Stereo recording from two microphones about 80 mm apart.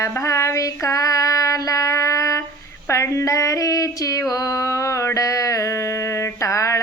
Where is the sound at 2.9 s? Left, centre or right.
Left.